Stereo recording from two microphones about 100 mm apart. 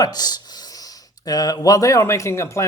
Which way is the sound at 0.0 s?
40° left (ahead or behind).